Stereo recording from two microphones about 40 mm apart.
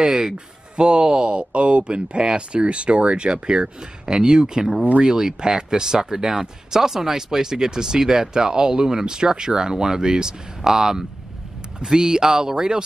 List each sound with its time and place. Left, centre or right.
0.0 s speech: centre